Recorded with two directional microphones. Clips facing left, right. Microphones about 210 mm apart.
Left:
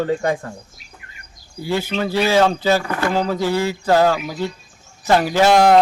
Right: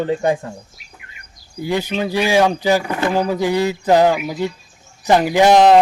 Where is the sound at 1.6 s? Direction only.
15° right (ahead or behind).